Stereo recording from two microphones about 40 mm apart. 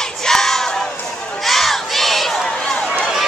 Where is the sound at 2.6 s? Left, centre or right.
Centre.